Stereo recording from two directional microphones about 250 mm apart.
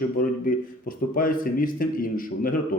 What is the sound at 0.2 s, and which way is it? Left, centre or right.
A man's voice, left.